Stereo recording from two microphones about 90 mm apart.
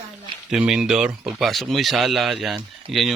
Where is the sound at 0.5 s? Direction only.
5° right (ahead or behind).